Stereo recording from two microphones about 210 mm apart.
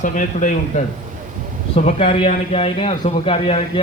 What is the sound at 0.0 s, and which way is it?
A man's voice, 35° left (ahead or behind).